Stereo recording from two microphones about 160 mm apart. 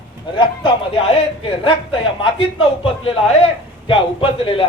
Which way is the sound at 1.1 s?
35° left (ahead or behind).